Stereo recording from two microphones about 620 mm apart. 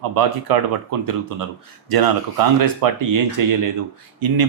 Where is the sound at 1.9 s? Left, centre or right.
Right.